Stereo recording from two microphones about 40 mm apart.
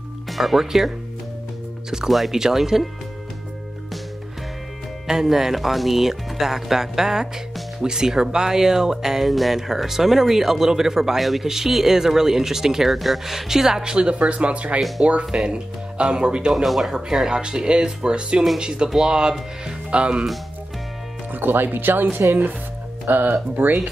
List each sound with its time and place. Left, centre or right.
0.3 s speech: centre
5.0 s speech: centre
13.9 s speech: right
14.8 s speech: centre
15.4 s speech: right
16.5 s speech: centre
17.3 s speech: right
19.6 s music: right
21.3 s speech: right